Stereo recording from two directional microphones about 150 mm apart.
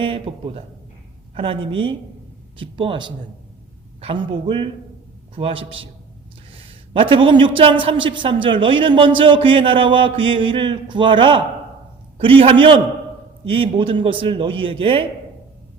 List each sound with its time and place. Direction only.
0.0 s a man's voice: 40° right (ahead or behind)